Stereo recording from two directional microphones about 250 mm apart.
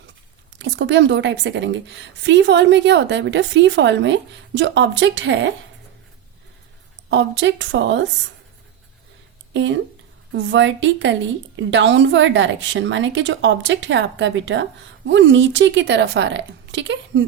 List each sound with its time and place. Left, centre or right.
0.6 s a woman's voice: right
7.1 s a woman's voice: right
9.5 s a woman's voice: right